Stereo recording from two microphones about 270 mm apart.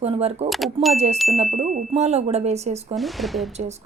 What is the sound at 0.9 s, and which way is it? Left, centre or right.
A woman's voice, right.